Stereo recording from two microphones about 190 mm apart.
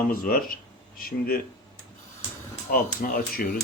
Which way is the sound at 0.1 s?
50° left (ahead or behind).